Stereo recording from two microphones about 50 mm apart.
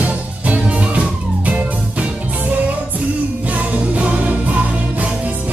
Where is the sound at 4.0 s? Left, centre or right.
Right.